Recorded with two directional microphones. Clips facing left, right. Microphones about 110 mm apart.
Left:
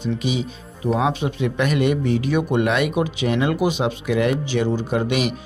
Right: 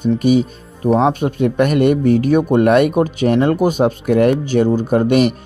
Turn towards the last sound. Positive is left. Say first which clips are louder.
# right 8 dB
turn(degrees=-50)  # may be behind; listen again after turning